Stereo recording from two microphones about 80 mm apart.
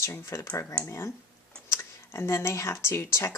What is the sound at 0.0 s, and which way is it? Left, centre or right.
Speech, left.